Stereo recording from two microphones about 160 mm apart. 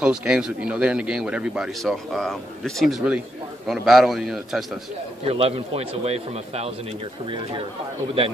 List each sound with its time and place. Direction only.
0.0 s a man's voice: 5° right (ahead or behind)
5.2 s a man's voice: 40° right (ahead or behind)